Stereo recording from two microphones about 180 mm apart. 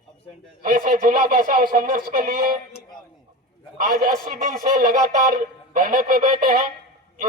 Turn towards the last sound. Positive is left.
turn(degrees=-50)  # may be behind; listen again after turning